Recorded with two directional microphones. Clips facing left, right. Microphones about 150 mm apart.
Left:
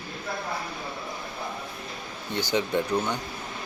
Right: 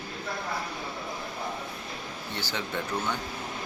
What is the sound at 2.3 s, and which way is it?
Speech, 15° left (ahead or behind).